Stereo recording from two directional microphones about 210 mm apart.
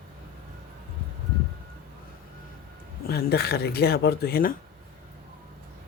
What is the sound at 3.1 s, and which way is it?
Speech, 50° left (ahead or behind).